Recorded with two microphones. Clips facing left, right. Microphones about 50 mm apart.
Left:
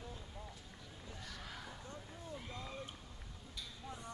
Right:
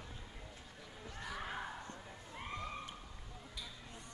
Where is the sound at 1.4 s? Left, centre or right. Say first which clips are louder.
Right 6 dB; right.